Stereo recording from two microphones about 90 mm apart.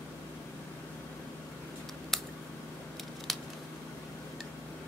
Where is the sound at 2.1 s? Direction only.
Centre (ahead or behind).